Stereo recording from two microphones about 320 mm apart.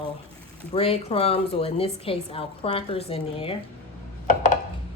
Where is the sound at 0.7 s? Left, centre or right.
Centre.